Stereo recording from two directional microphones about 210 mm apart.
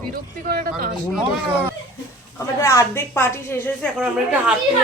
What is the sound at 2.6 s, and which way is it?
Speech, 10° left (ahead or behind).